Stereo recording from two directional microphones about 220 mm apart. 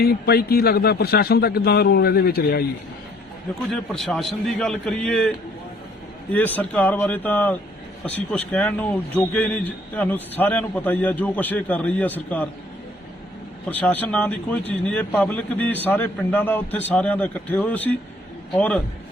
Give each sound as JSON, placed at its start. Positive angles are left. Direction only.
{"t": 0.0, "sound": "a man's voice", "side_deg": 45}
{"t": 3.5, "sound": "a man's voice", "side_deg": 0}
{"t": 6.3, "sound": "a man's voice", "side_deg": 5}
{"t": 13.7, "sound": "a man's voice", "side_deg": 5}